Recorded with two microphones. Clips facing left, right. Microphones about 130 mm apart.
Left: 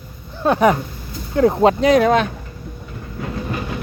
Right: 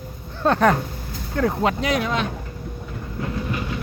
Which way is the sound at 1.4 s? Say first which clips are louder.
Left 7 dB; 25° left (ahead or behind).